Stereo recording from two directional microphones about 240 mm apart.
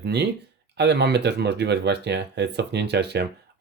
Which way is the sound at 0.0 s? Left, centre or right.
Right.